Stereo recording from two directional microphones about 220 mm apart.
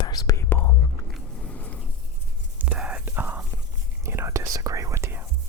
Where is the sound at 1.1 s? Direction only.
5° left (ahead or behind).